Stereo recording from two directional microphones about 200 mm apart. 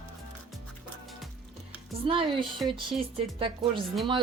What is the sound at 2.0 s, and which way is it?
Speech, 25° right (ahead or behind).